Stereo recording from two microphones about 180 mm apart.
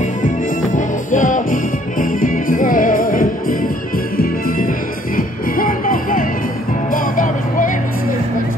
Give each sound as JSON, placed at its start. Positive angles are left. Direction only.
{"t": 0.7, "sound": "music", "side_deg": 45}